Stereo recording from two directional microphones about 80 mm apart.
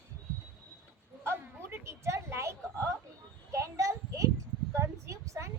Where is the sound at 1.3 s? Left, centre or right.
Right.